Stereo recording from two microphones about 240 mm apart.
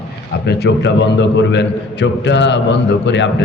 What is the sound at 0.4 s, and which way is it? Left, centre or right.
A man's voice, left.